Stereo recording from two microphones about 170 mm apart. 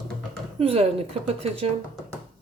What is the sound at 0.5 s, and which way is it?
Speech, 35° right (ahead or behind).